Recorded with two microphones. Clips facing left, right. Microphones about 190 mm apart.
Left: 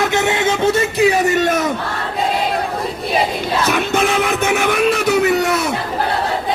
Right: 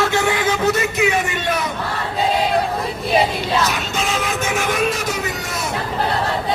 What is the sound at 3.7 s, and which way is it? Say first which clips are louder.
Music: left 7 dB; 60° left (ahead or behind).